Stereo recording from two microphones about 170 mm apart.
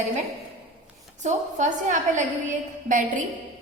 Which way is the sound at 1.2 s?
45° right (ahead or behind).